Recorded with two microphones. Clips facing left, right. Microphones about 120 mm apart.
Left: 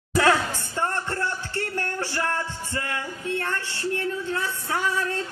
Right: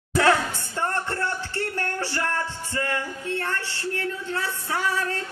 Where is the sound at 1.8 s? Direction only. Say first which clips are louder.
Left 1 dB; 15° left (ahead or behind).